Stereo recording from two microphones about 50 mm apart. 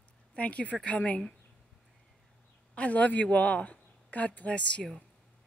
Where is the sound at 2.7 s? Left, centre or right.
Left.